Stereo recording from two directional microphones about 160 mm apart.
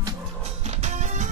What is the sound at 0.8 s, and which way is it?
Music, 45° right (ahead or behind).